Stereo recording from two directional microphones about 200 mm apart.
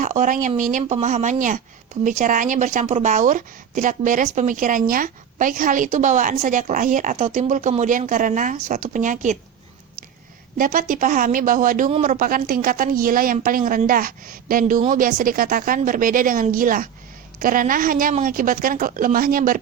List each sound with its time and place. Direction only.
0.0 s a sound: 40° right (ahead or behind)
0.4 s speech: 40° right (ahead or behind)
10.6 s a woman's voice: 45° right (ahead or behind)